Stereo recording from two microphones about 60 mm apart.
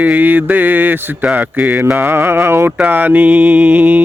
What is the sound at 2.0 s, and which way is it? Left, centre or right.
Speech, right.